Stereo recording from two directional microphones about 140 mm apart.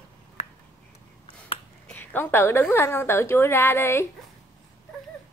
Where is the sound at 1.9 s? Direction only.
15° left (ahead or behind).